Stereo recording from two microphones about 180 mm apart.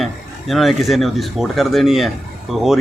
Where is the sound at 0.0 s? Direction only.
Centre (ahead or behind).